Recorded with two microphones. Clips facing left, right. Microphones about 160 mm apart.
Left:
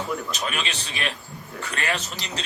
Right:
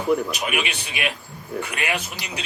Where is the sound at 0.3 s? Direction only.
15° right (ahead or behind).